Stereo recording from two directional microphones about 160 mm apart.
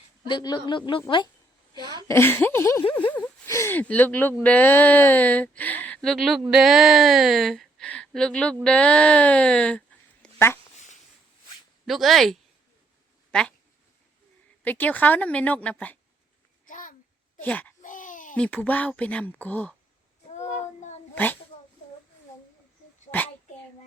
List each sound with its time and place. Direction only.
0.3 s a woman's voice: 30° left (ahead or behind)
2.0 s a woman's voice: 15° left (ahead or behind)
11.9 s a woman's voice: centre (ahead or behind)
14.6 s speech: 10° left (ahead or behind)
16.6 s babbling: 55° left (ahead or behind)
17.4 s speech: 10° left (ahead or behind)
17.8 s a sound: 55° left (ahead or behind)
18.3 s speech: 10° left (ahead or behind)
23.1 s a sound: 40° left (ahead or behind)